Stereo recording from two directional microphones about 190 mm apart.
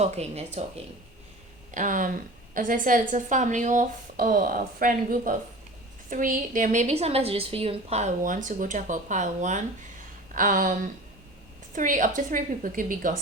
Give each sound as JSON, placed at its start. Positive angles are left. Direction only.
{"t": 0.0, "sound": "a woman's voice", "side_deg": -35}